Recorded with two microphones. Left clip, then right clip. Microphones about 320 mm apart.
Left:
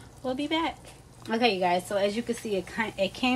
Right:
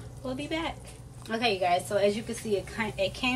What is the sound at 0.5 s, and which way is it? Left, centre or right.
A woman's voice, left.